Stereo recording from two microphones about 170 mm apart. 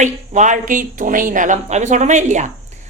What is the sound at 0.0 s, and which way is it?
Speech, 45° right (ahead or behind).